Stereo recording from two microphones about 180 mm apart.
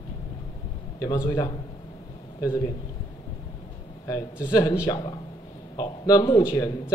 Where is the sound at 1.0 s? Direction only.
20° left (ahead or behind).